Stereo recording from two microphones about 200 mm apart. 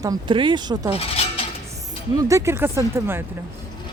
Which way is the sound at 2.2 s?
15° right (ahead or behind).